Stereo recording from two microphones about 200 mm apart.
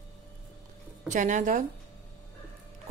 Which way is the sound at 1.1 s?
40° right (ahead or behind).